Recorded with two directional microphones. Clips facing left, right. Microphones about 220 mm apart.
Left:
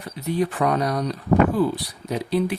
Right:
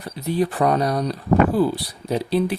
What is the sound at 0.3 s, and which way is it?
Speech, 35° right (ahead or behind).